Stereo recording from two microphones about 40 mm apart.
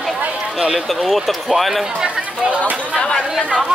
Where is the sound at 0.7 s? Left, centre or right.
Centre.